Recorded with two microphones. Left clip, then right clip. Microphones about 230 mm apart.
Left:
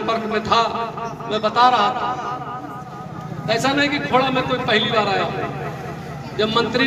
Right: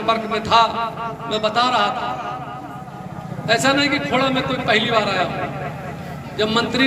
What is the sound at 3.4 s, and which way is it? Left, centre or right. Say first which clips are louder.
A man's voice: right 2 dB; right.